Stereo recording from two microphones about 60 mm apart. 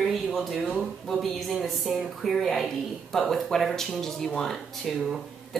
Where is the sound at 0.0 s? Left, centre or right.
Centre.